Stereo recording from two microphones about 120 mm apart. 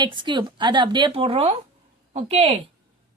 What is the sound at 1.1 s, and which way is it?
Speech, 55° right (ahead or behind).